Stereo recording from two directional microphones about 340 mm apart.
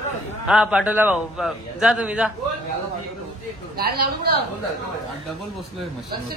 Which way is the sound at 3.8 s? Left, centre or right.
Right.